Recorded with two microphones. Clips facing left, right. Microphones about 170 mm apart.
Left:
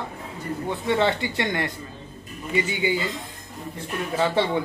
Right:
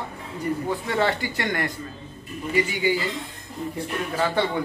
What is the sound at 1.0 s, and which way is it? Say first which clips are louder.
Speech: left 1 dB; 25° left (ahead or behind).